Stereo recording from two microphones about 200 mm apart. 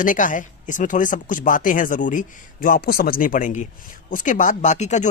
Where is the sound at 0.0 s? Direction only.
40° left (ahead or behind).